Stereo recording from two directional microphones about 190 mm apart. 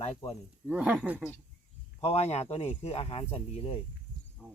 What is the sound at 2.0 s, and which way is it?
Speech, 35° left (ahead or behind).